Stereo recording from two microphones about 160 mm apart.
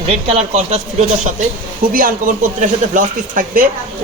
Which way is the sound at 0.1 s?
40° right (ahead or behind).